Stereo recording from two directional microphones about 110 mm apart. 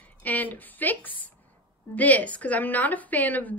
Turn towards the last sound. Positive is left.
turn(degrees=15)  # may be behind; listen again after turning